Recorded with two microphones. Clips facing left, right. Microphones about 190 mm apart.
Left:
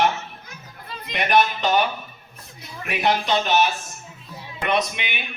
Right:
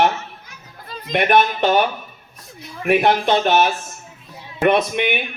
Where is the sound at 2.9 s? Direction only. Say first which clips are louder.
Right 6 dB; 55° right (ahead or behind).